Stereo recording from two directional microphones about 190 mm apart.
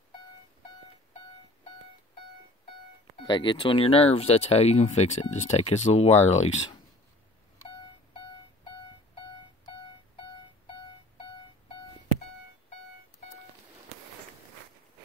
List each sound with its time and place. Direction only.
3.3 s speech: 25° left (ahead or behind)